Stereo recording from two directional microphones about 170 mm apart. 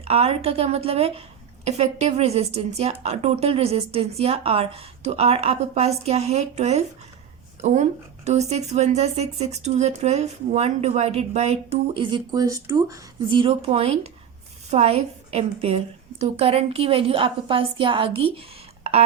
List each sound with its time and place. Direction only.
0.0 s speech: 35° right (ahead or behind)